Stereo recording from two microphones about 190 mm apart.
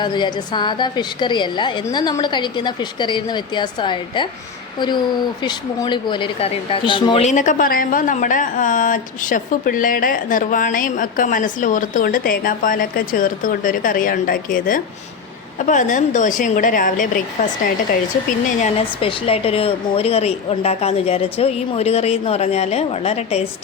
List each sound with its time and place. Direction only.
0.0 s a woman's voice: 25° left (ahead or behind)
5.4 s a woman's voice: 25° left (ahead or behind)
7.3 s a woman's voice: 40° left (ahead or behind)
18.4 s a woman's voice: 35° left (ahead or behind)